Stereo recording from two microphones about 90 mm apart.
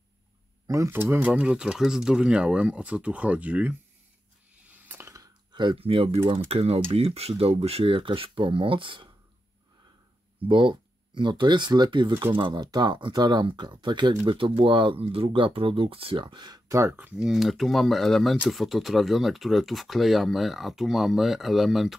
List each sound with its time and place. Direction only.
0.7 s speech: 35° right (ahead or behind)
0.9 s speech: 20° right (ahead or behind)
4.6 s a sound: 20° right (ahead or behind)
5.0 s a sound: 40° right (ahead or behind)
5.5 s speech: 60° right (ahead or behind)
10.5 s speech: 60° right (ahead or behind)
12.1 s speech: 25° right (ahead or behind)
12.4 s speech: 70° right (ahead or behind)
12.7 s speech: 60° right (ahead or behind)
16.7 s speech: 30° right (ahead or behind)
17.0 s speech: 15° right (ahead or behind)
17.3 s speech: centre (ahead or behind)